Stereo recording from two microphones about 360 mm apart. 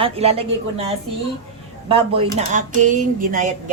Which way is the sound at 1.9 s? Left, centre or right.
Centre.